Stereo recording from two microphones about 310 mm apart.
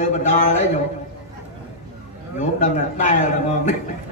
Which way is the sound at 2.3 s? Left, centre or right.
Left.